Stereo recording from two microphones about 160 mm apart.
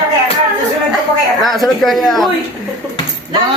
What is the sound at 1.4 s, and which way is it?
Speech, centre (ahead or behind).